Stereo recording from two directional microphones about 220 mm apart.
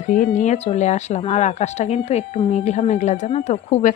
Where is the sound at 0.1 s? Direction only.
35° left (ahead or behind).